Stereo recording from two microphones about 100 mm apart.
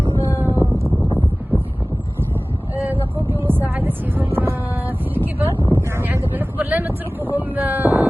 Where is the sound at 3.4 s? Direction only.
20° right (ahead or behind).